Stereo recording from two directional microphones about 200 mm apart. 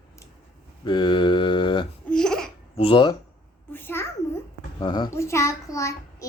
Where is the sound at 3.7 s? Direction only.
10° left (ahead or behind).